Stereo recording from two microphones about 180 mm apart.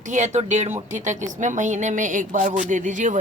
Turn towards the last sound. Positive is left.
turn(degrees=-45)  # may be behind; listen again after turning